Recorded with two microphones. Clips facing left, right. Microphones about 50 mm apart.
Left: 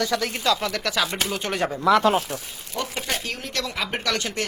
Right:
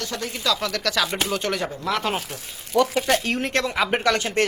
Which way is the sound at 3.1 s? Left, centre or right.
Right.